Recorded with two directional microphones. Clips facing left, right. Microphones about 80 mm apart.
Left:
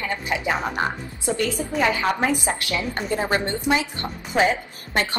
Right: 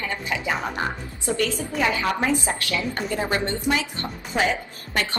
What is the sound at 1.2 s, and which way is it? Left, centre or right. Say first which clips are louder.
A woman's voice: left 1 dB; left.